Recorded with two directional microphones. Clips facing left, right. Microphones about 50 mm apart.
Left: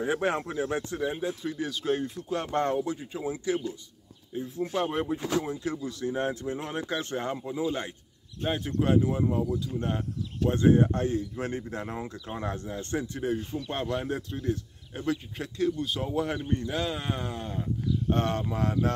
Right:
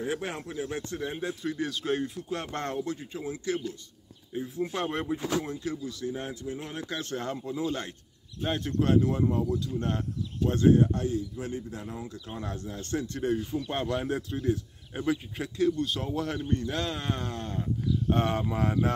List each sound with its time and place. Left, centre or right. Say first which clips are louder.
0.0 s speech: left 5 dB; centre
1.0 s speech: left 2 dB; centre
4.3 s speech: even; centre
5.7 s speech: left 2 dB; left; by 10.0 s centre
10.5 s speech: even; left
13.5 s speech: right 1 dB; centre
18.1 s speech: right 1 dB; centre